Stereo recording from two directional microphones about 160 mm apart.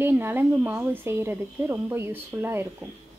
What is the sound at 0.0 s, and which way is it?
Speech, 15° right (ahead or behind).